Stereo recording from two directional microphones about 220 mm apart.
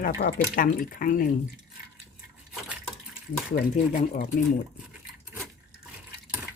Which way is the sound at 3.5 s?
35° left (ahead or behind).